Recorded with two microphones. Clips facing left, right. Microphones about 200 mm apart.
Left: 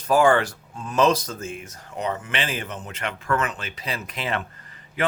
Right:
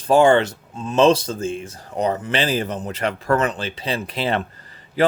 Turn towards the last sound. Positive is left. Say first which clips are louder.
# right 7 dB
turn(degrees=-35)  # may be behind; listen again after turning